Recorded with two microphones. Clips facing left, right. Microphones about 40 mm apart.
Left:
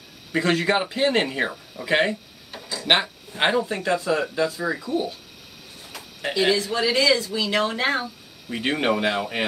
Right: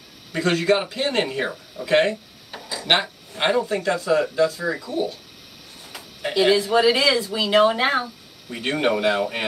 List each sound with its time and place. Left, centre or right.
0.3 s a man's voice: centre
3.3 s a man's voice: centre
6.3 s speech: centre
8.5 s speech: centre